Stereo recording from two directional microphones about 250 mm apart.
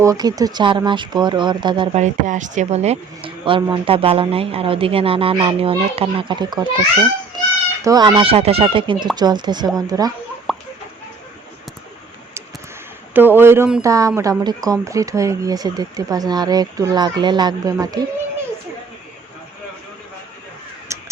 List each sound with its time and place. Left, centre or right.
0.0 s speech: centre
2.2 s speech: right
7.9 s speech: centre
10.5 s chicken: centre
13.1 s speech: centre
20.9 s crow: centre